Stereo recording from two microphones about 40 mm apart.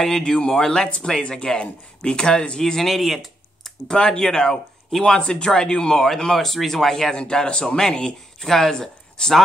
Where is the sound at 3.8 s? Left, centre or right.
Left.